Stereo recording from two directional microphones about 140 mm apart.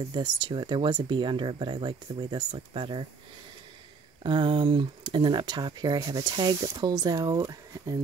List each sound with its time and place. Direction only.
0.1 s speech: 35° right (ahead or behind)
4.2 s speech: 35° right (ahead or behind)